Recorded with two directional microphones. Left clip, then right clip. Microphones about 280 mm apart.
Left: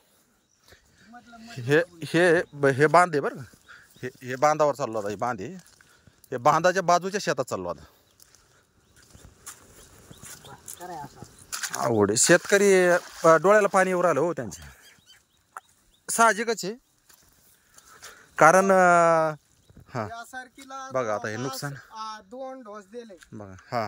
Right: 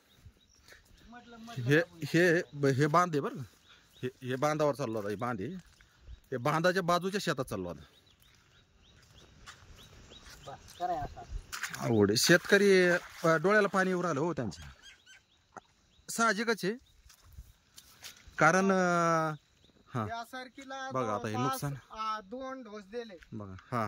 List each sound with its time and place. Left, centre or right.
1.7 s speech: centre
11.5 s a sound: left
11.9 s speech: centre
16.2 s speech: centre
18.3 s speech: centre